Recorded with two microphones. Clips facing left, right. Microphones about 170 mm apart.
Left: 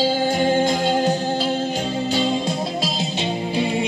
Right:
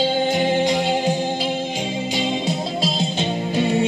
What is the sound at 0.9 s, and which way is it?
Music, 10° right (ahead or behind).